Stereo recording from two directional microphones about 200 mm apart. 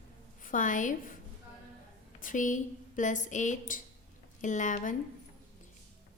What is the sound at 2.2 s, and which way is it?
Speech, 40° left (ahead or behind).